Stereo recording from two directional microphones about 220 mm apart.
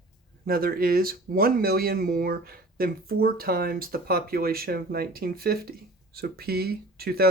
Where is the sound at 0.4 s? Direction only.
40° right (ahead or behind).